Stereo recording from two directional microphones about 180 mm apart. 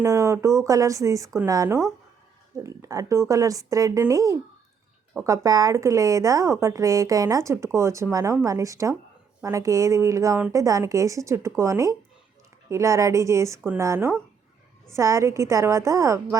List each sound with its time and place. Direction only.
0.0 s speech: 15° right (ahead or behind)